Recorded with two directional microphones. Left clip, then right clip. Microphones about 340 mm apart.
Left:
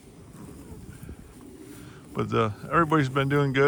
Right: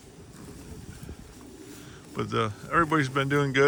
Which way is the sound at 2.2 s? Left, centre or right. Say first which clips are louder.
Left 3 dB; centre.